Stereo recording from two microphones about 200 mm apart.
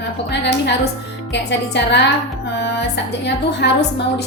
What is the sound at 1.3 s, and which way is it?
A woman's voice, 60° left (ahead or behind).